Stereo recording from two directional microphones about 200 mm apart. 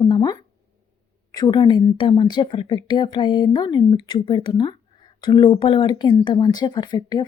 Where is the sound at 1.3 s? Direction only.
20° left (ahead or behind).